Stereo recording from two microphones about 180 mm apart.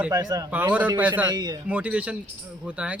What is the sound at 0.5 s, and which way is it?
Speech, 10° right (ahead or behind).